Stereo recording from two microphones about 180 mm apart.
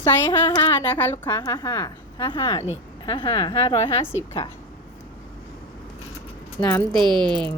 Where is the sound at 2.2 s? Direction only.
25° left (ahead or behind).